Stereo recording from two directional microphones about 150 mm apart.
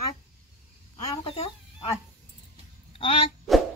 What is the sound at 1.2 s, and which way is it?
Chicken, 40° left (ahead or behind).